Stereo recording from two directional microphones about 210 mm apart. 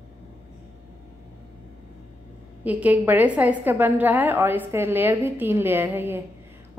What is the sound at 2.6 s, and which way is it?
A woman's voice, 5° right (ahead or behind).